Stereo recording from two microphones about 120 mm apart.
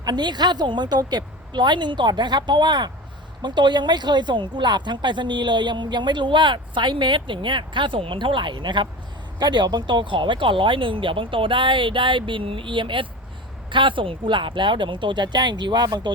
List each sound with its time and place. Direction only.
0.0 s speech: 35° right (ahead or behind)